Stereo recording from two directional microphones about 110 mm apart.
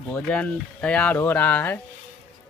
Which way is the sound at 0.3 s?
10° left (ahead or behind).